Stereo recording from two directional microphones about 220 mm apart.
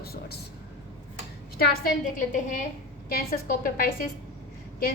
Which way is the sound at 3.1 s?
40° left (ahead or behind).